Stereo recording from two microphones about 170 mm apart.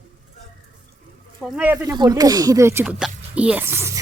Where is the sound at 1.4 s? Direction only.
5° right (ahead or behind).